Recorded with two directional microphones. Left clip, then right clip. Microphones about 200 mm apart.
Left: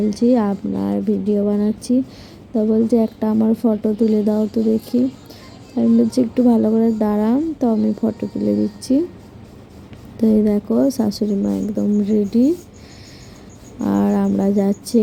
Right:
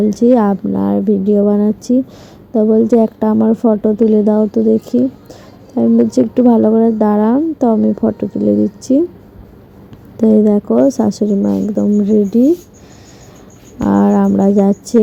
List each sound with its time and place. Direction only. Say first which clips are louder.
0.1 s speech: right 6 dB; 20° right (ahead or behind)
10.2 s speech: right 6 dB; 20° right (ahead or behind)
13.8 s speech: right 6 dB; 15° right (ahead or behind)